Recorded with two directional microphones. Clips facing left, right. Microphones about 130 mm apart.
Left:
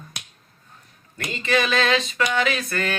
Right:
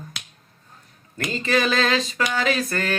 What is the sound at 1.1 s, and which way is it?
Mantra, 35° right (ahead or behind).